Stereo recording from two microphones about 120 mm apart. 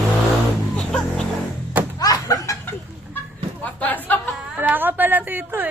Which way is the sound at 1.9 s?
30° left (ahead or behind).